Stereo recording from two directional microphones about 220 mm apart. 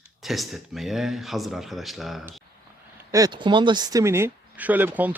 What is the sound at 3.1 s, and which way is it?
Speech, 20° right (ahead or behind).